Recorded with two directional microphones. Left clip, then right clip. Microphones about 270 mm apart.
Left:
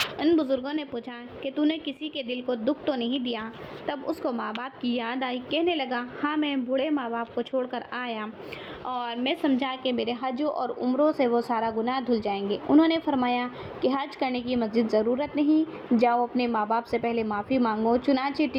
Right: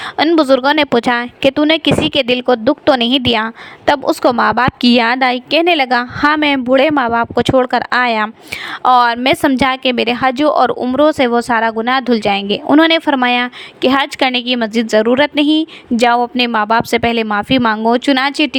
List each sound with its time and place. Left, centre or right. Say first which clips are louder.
0.2 s a woman's voice: right 16 dB; right